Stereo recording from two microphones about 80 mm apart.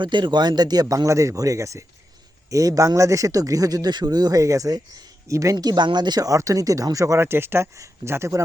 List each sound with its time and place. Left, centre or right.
0.0 s speech: right
4.4 s speech: right